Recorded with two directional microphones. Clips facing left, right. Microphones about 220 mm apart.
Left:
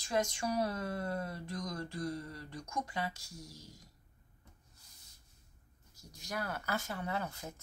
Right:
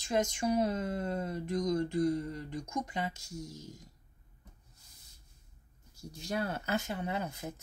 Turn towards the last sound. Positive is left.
turn(degrees=-20)  # may be behind; listen again after turning